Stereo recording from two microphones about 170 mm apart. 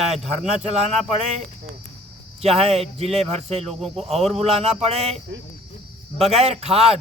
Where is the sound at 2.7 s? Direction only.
35° right (ahead or behind).